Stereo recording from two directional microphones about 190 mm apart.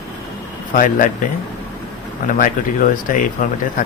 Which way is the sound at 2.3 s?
45° left (ahead or behind).